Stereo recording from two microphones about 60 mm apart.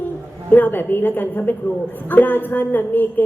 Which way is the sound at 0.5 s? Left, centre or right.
Left.